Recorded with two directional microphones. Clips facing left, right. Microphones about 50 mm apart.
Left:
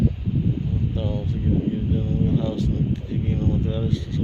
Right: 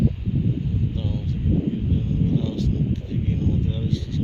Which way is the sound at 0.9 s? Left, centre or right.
Centre.